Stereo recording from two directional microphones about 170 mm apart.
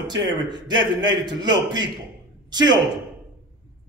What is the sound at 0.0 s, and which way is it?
A woman's voice, 25° right (ahead or behind).